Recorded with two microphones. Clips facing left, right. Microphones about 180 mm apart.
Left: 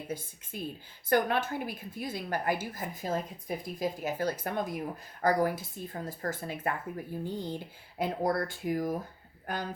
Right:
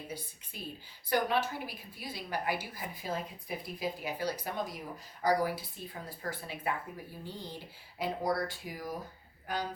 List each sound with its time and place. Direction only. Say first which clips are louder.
0.5 s speech: left 6 dB; 50° left (ahead or behind)